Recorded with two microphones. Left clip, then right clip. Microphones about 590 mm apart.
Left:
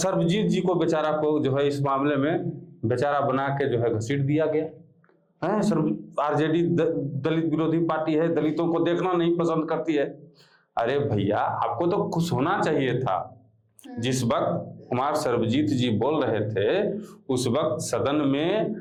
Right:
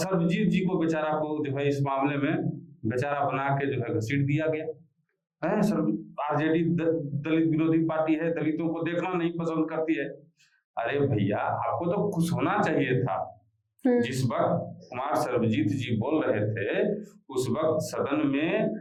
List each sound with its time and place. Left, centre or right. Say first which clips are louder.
0.0 s a man's voice: left 4 dB; left
14.0 s a man's voice: left 2 dB; left